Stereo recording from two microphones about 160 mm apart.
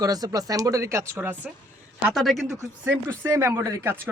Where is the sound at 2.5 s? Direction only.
15° right (ahead or behind).